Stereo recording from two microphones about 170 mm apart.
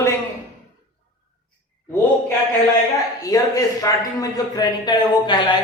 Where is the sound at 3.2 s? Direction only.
20° left (ahead or behind).